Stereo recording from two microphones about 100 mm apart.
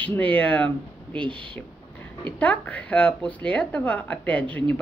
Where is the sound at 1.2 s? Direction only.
60° right (ahead or behind).